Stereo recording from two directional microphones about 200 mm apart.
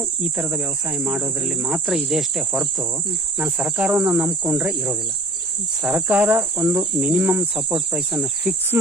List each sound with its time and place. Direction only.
0.2 s speech: 5° right (ahead or behind)
3.3 s cricket: 5° right (ahead or behind)